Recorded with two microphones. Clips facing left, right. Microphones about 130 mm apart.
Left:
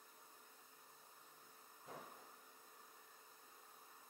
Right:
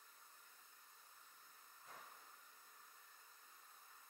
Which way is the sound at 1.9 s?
30° left (ahead or behind).